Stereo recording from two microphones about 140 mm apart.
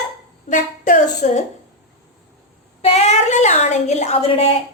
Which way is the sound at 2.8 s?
50° left (ahead or behind).